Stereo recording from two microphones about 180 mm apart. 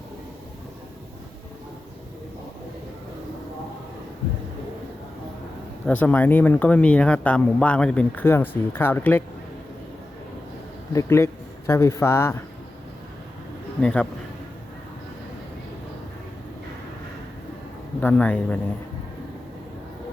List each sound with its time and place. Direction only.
5.8 s speech: 10° left (ahead or behind)
10.9 s a man's voice: 15° left (ahead or behind)
13.8 s a man's voice: 5° left (ahead or behind)
18.0 s speech: 10° left (ahead or behind)